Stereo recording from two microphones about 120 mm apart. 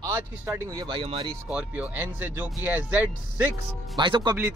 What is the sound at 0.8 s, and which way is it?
Speech, 50° right (ahead or behind).